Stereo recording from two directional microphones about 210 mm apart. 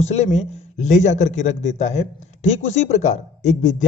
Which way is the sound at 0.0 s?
30° left (ahead or behind).